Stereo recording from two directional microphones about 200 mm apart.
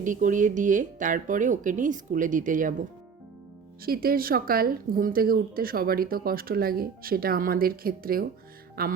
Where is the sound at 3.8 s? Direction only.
45° right (ahead or behind).